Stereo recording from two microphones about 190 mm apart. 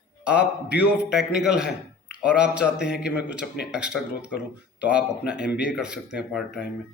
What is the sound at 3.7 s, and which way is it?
Speech, 5° right (ahead or behind).